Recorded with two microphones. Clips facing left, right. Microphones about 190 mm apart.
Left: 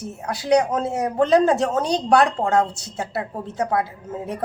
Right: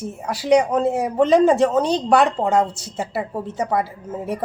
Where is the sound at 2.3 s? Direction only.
15° right (ahead or behind).